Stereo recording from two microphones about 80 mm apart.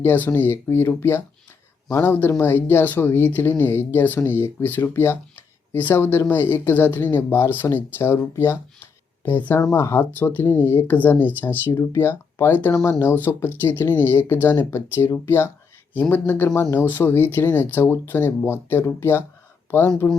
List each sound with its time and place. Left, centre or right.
0.0 s speech: left
2.4 s speech: left
11.7 s speech: left
12.7 s speech: left
13.0 s speech: left